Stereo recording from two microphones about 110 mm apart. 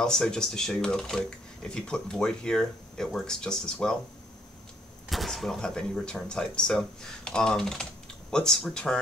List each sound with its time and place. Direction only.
0.0 s speech: 5° left (ahead or behind)
5.1 s speech: centre (ahead or behind)